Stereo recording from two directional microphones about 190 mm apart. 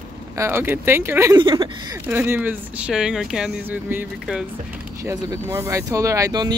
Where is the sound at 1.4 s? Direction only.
25° right (ahead or behind).